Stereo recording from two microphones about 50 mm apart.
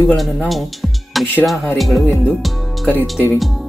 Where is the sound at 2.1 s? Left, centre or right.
Left.